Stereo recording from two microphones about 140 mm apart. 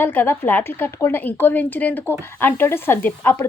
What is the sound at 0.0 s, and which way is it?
A woman's voice, 15° left (ahead or behind).